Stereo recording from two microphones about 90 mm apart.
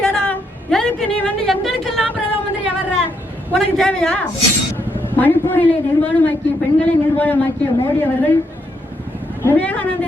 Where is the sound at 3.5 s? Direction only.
10° left (ahead or behind).